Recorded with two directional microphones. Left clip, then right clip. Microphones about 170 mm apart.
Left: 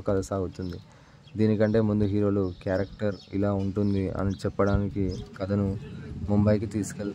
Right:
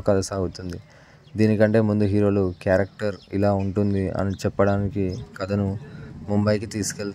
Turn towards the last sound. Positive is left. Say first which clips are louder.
# right 3 dB
turn(degrees=-15)  # may be behind; listen again after turning